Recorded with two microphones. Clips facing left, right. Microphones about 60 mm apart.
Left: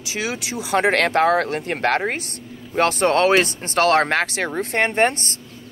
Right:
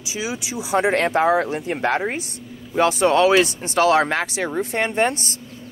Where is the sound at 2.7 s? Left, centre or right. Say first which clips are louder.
Right 1 dB; left.